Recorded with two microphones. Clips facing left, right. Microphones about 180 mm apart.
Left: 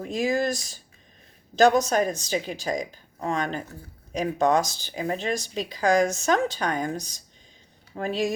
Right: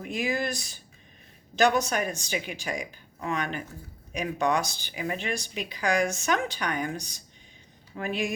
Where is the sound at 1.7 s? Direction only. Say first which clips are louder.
Left 5 dB; 40° left (ahead or behind).